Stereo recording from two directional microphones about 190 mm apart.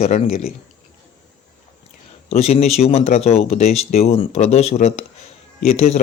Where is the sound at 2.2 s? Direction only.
35° left (ahead or behind).